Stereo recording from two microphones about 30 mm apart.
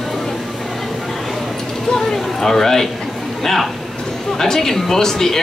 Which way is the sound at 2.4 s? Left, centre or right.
Centre.